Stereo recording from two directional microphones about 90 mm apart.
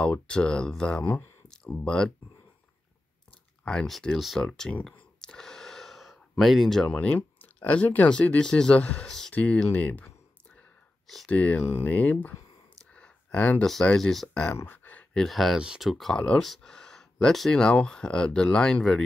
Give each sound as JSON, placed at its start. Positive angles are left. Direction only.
{"t": 0.0, "sound": "speech", "side_deg": 10}
{"t": 3.6, "sound": "speech", "side_deg": 5}
{"t": 5.2, "sound": "gasp", "side_deg": 5}
{"t": 7.2, "sound": "speech", "side_deg": 20}
{"t": 11.2, "sound": "speech", "side_deg": 15}
{"t": 12.9, "sound": "a sound", "side_deg": 15}
{"t": 13.9, "sound": "speech", "side_deg": 5}
{"t": 14.5, "sound": "a sound", "side_deg": 25}
{"t": 15.1, "sound": "speech", "side_deg": 0}